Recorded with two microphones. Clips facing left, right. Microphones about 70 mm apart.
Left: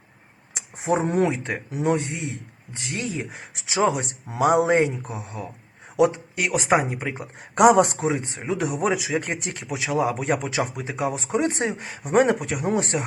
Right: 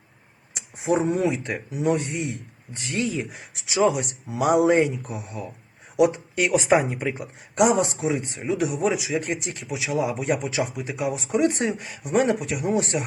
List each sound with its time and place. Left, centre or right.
0.5 s speech: left
6.9 s speech: left
7.5 s a man's voice: left
10.8 s speech: left